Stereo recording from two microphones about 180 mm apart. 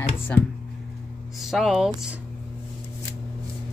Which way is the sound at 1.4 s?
Centre (ahead or behind).